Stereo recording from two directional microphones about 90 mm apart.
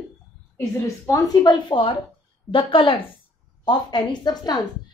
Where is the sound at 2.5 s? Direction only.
75° left (ahead or behind).